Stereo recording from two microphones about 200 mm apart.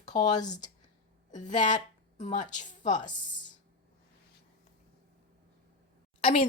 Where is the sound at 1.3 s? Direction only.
40° left (ahead or behind).